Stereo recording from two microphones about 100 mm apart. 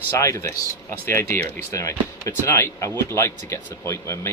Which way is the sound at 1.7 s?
30° left (ahead or behind).